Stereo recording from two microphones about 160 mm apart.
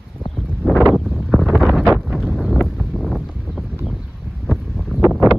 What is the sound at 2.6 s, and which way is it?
Wind, centre (ahead or behind).